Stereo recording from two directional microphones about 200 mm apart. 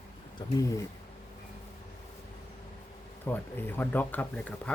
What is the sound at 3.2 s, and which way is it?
Speech, 10° left (ahead or behind).